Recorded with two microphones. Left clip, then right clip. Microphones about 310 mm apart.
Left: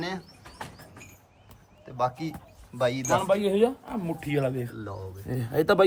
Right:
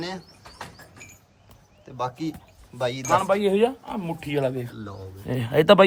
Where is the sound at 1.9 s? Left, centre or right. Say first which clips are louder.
Left 1 dB; centre.